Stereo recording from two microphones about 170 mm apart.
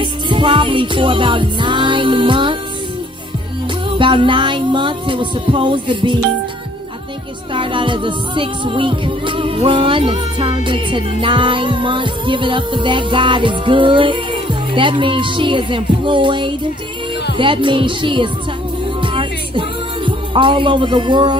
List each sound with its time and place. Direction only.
0.0 s music: 30° right (ahead or behind)
4.0 s music: 30° right (ahead or behind)
7.5 s music: 30° right (ahead or behind)